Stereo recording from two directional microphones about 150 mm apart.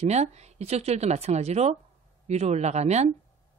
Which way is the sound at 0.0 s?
45° right (ahead or behind).